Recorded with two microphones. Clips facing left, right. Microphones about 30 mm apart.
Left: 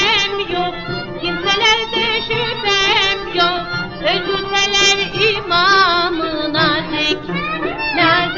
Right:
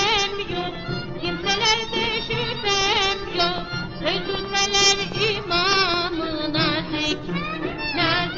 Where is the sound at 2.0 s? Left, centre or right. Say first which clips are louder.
Left 7 dB; left.